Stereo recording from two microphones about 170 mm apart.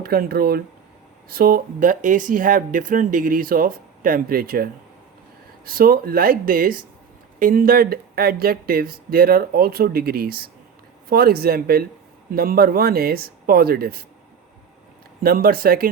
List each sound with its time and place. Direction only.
0.0 s speech: 65° right (ahead or behind)
15.2 s speech: 60° right (ahead or behind)